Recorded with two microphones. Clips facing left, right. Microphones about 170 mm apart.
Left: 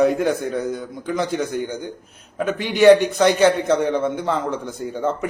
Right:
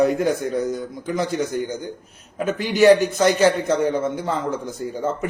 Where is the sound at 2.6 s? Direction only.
Centre (ahead or behind).